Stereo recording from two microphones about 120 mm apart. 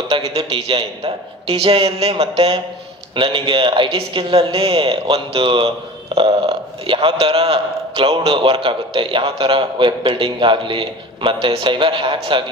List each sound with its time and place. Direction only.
0.3 s speech: 55° right (ahead or behind)